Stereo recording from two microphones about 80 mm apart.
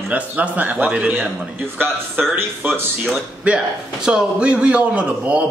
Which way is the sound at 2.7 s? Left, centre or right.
Centre.